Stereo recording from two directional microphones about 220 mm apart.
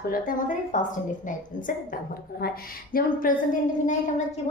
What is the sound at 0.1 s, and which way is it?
Speech, 35° left (ahead or behind).